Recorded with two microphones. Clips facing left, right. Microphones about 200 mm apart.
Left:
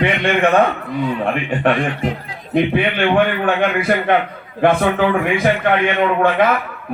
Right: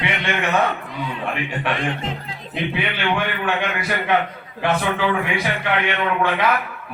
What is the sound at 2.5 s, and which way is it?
A man's voice, 55° left (ahead or behind).